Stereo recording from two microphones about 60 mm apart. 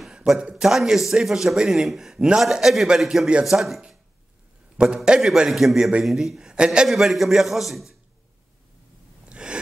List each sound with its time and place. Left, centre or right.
0.4 s a man's voice: centre
4.8 s a man's voice: centre
6.9 s a man's voice: centre
9.3 s a sound: centre